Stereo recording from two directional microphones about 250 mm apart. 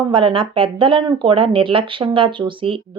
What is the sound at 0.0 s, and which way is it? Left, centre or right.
Speech, right.